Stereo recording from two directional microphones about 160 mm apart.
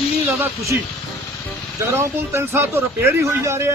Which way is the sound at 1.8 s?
15° right (ahead or behind).